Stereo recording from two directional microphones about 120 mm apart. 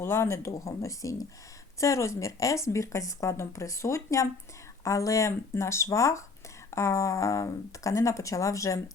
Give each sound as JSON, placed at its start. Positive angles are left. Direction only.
{"t": 0.0, "sound": "speech", "side_deg": 20}